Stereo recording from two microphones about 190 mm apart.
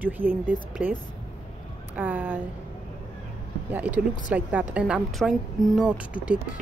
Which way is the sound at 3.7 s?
5° right (ahead or behind).